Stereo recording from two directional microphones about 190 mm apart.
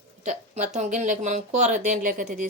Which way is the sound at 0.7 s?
40° right (ahead or behind).